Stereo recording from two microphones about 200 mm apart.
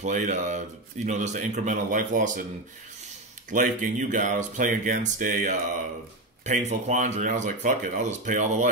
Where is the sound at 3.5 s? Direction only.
40° right (ahead or behind).